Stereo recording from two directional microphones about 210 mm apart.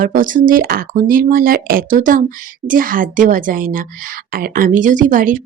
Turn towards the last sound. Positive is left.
turn(degrees=-40)  # may be behind; listen again after turning